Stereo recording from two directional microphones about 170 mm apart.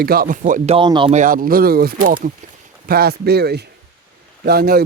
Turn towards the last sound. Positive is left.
turn(degrees=-65)  # may be behind; listen again after turning